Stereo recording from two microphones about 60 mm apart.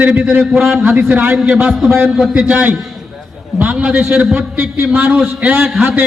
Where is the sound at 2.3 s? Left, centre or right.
Centre.